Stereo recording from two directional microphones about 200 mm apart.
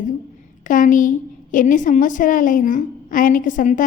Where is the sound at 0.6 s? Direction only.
40° left (ahead or behind).